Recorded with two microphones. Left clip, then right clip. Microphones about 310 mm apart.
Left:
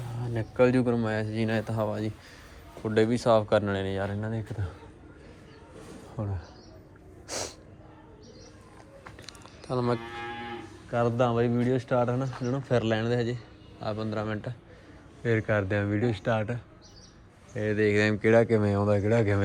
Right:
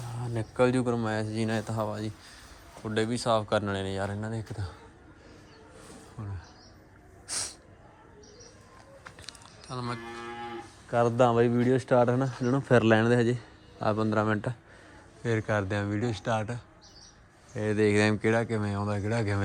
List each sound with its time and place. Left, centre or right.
0.2 s a man's voice: centre
6.2 s speech: centre
7.3 s snort: centre
9.2 s a sound: centre
10.9 s speech: right
15.2 s a man's voice: centre